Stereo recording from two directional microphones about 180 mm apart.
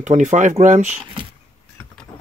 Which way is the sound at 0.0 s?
40° right (ahead or behind).